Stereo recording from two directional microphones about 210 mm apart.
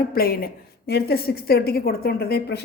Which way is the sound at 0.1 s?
45° left (ahead or behind).